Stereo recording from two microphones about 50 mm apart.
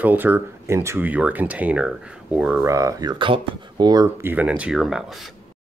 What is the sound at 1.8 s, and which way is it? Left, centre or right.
Speech, right.